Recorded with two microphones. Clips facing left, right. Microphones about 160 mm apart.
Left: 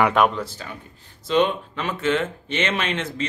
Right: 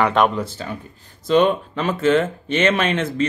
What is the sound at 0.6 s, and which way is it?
Speech, 30° right (ahead or behind).